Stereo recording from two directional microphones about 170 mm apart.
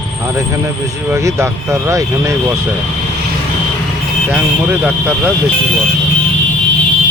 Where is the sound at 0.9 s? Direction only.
15° right (ahead or behind).